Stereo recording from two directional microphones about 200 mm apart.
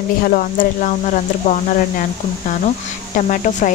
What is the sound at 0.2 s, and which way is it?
Speech, 40° left (ahead or behind).